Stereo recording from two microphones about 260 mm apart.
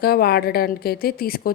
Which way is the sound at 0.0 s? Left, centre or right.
Left.